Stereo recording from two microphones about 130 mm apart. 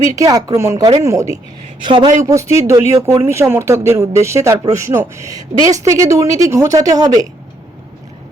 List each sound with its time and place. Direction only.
0.2 s speech: 25° right (ahead or behind)
1.9 s a woman's voice: 35° right (ahead or behind)
2.2 s speech: 25° right (ahead or behind)